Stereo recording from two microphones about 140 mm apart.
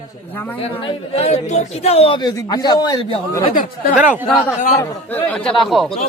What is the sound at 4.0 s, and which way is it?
Speech, 10° right (ahead or behind).